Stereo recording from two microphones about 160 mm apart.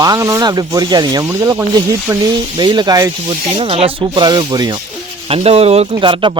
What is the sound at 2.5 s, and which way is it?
Speech, 25° right (ahead or behind).